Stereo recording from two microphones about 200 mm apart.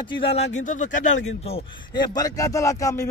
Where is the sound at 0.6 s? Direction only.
40° left (ahead or behind).